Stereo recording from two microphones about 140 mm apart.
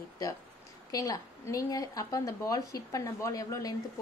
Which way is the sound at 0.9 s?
25° left (ahead or behind).